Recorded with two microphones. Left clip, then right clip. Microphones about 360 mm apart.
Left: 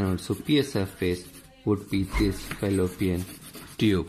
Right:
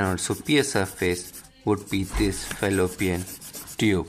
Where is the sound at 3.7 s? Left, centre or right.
Centre.